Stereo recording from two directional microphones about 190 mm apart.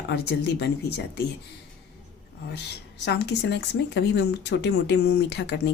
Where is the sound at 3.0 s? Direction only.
60° left (ahead or behind).